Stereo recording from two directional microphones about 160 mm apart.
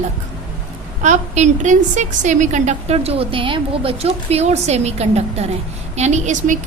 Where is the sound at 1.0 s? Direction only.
50° right (ahead or behind).